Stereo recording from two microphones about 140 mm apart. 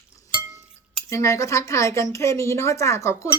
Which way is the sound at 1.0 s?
20° left (ahead or behind).